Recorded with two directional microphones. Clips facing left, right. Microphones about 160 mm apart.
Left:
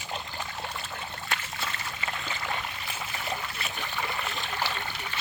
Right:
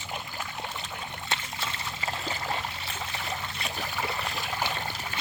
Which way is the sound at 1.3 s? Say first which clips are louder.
Even; 25° right (ahead or behind).